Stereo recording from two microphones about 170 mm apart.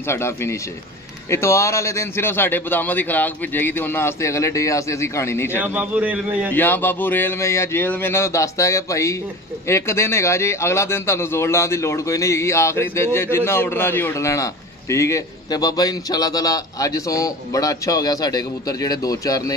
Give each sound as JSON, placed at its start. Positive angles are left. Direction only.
{"t": 0.0, "sound": "a man's voice", "side_deg": 15}
{"t": 5.6, "sound": "a man's voice", "side_deg": -10}
{"t": 6.5, "sound": "a man's voice", "side_deg": 10}